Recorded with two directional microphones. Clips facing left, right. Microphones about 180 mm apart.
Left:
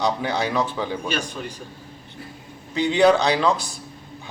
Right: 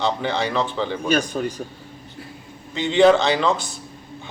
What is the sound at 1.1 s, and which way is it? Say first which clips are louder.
Speech: right 7 dB; 45° right (ahead or behind).